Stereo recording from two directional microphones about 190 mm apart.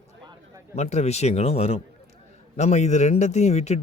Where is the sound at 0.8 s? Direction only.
35° left (ahead or behind).